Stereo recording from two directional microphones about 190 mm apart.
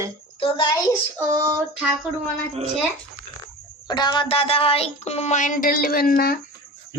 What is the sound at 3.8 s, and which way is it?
Speech, 20° left (ahead or behind).